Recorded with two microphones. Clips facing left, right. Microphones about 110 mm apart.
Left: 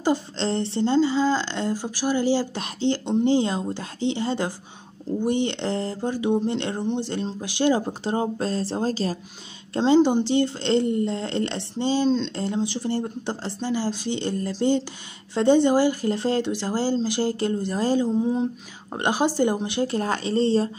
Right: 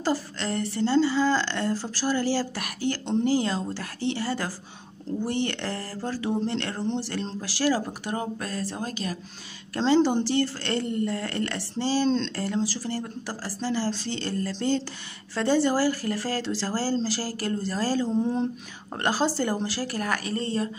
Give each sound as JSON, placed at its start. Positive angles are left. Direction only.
{"t": 0.0, "sound": "speech", "side_deg": 25}
{"t": 9.8, "sound": "speech", "side_deg": 15}